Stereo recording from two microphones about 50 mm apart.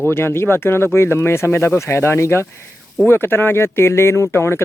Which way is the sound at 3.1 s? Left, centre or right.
Left.